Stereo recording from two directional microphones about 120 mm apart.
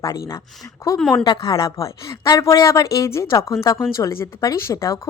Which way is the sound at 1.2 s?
40° left (ahead or behind).